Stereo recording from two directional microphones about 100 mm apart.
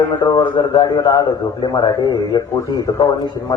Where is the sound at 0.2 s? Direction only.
45° left (ahead or behind).